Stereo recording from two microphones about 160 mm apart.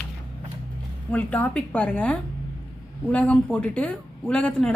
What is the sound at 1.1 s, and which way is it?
A woman's voice, 10° left (ahead or behind).